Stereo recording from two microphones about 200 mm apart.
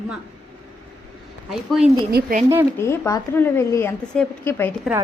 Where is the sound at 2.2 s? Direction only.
55° right (ahead or behind).